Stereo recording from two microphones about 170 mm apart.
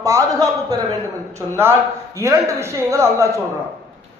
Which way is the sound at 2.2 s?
15° right (ahead or behind).